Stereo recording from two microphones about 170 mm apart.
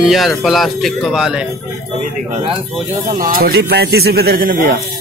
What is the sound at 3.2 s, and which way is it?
A man's voice, 60° right (ahead or behind).